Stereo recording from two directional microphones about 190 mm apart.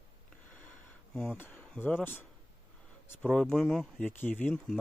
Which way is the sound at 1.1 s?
5° left (ahead or behind).